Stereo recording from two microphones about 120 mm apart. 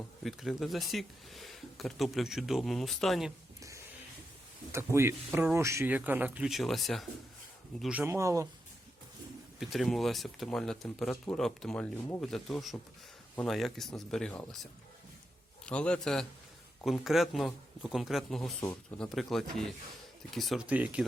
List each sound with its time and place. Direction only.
0.3 s speech: centre (ahead or behind)
4.7 s speech: 20° right (ahead or behind)
6.5 s speech: centre (ahead or behind)
8.0 s speech: 25° right (ahead or behind)
9.6 s a man's voice: centre (ahead or behind)
20.7 s speech: 10° right (ahead or behind)